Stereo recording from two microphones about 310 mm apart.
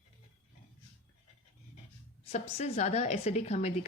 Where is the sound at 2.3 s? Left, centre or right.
Centre.